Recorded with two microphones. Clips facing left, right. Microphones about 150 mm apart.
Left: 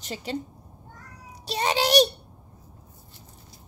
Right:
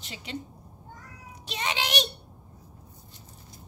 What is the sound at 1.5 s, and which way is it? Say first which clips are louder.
Child singing: left 8 dB; 40° left (ahead or behind).